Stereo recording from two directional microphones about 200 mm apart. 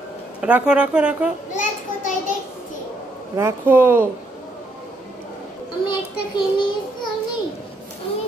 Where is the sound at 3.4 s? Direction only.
10° right (ahead or behind).